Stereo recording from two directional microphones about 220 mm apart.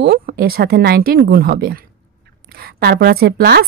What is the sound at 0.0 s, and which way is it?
A woman's voice, 45° right (ahead or behind).